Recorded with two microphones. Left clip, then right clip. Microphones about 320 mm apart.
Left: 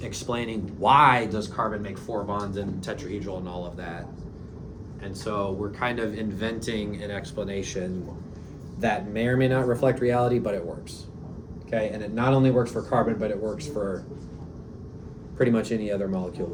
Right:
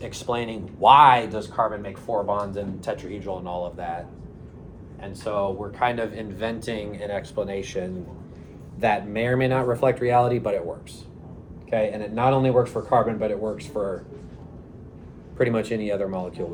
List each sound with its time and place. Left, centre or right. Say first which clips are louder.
0.0 s speech: right 3 dB; centre
5.2 s a man's voice: right 3 dB; centre
11.7 s a man's voice: right 4 dB; centre
15.4 s a man's voice: right 1 dB; right